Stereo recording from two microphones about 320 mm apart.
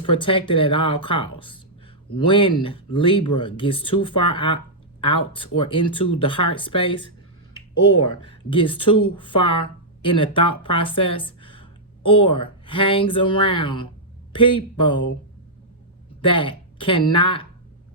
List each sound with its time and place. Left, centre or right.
0.2 s speech: centre
8.0 s speech: centre
16.2 s speech: centre